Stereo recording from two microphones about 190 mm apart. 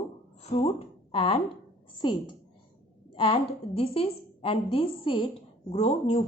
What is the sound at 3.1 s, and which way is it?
A woman's voice, 30° left (ahead or behind).